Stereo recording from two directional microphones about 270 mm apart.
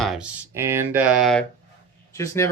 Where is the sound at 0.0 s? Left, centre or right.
Centre.